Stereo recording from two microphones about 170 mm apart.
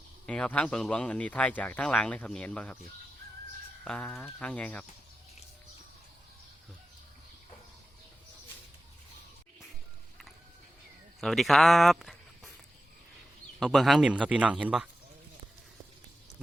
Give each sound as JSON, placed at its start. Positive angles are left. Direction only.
{"t": 0.3, "sound": "speech", "side_deg": 10}
{"t": 3.8, "sound": "speech", "side_deg": 5}
{"t": 11.2, "sound": "speech", "side_deg": 0}
{"t": 13.6, "sound": "speech", "side_deg": 0}